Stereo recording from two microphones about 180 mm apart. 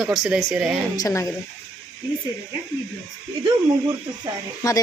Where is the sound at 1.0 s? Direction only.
20° left (ahead or behind).